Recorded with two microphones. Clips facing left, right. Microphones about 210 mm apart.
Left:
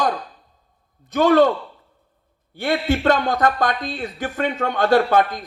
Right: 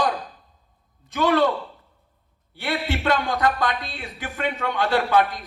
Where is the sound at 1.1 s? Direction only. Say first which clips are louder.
Left 6 dB; 45° left (ahead or behind).